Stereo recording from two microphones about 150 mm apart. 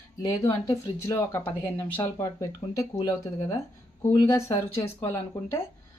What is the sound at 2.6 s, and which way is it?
Speech, 30° left (ahead or behind).